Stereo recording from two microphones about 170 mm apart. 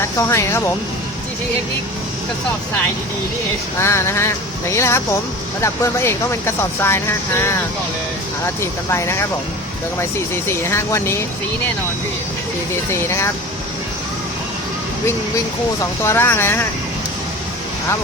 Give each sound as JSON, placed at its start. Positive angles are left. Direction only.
{"t": 0.2, "sound": "speech", "side_deg": 15}
{"t": 3.8, "sound": "speech", "side_deg": 15}
{"t": 10.6, "sound": "speech", "side_deg": 15}
{"t": 12.9, "sound": "speech", "side_deg": 15}
{"t": 15.8, "sound": "speech", "side_deg": 15}